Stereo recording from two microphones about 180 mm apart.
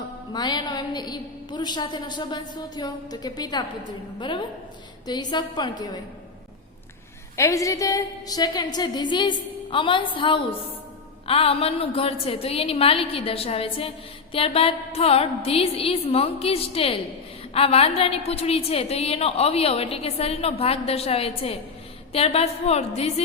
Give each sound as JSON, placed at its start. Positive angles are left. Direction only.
{"t": 0.3, "sound": "a woman's voice", "side_deg": 25}
{"t": 7.3, "sound": "a woman's voice", "side_deg": 15}